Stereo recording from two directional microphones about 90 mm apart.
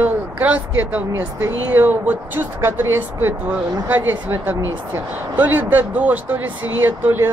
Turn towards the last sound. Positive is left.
turn(degrees=-25)  # may be behind; listen again after turning